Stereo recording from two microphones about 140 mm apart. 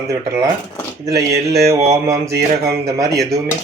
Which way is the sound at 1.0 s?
25° right (ahead or behind).